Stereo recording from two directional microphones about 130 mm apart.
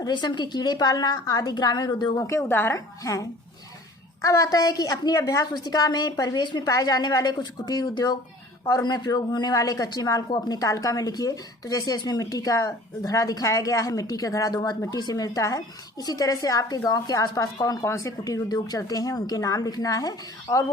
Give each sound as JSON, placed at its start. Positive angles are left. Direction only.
{"t": 0.0, "sound": "a woman's voice", "side_deg": 35}